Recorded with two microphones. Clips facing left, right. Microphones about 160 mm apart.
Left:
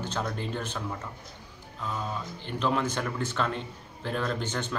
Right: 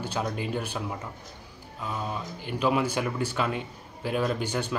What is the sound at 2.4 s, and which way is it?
Speech, 10° right (ahead or behind).